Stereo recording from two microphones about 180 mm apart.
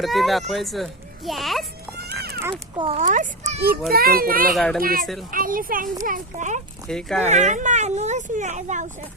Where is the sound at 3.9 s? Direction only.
55° right (ahead or behind).